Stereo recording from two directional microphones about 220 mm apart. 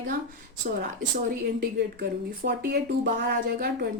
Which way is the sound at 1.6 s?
45° right (ahead or behind).